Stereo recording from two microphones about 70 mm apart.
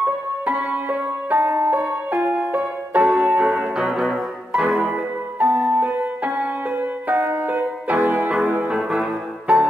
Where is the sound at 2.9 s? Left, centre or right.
Centre.